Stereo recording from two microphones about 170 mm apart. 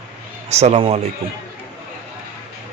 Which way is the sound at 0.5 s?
40° right (ahead or behind).